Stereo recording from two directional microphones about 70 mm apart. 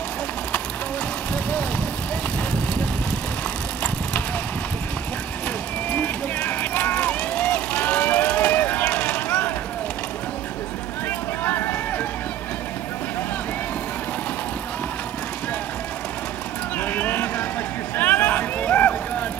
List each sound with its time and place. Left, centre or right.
5.9 s run: left
8.8 s vehicle: left
11.1 s vehicle: left
16.7 s clip-clop: left
17.9 s vehicle: left